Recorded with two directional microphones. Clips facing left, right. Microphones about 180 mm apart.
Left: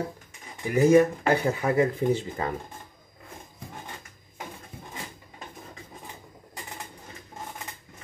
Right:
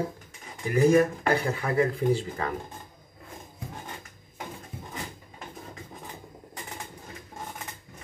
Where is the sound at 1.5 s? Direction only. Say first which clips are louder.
Left 2 dB; 25° left (ahead or behind).